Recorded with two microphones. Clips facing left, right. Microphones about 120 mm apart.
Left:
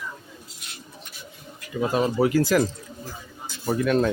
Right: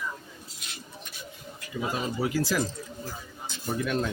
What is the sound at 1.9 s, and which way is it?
Speech, 60° left (ahead or behind).